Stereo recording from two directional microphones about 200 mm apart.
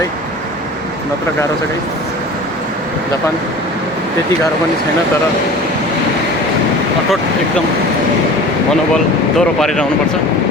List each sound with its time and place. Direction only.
9.4 s speech: centre (ahead or behind)